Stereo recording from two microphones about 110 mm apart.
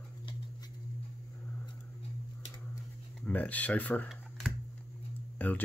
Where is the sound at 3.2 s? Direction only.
15° left (ahead or behind).